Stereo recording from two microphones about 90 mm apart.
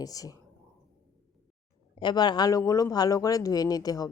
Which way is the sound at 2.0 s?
55° left (ahead or behind).